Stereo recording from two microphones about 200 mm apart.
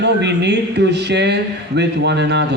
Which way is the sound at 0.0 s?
60° right (ahead or behind).